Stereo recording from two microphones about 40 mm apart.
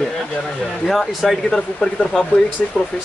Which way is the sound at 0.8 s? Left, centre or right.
Centre.